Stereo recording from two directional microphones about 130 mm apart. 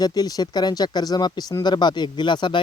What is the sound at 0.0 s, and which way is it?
Speech, 30° left (ahead or behind).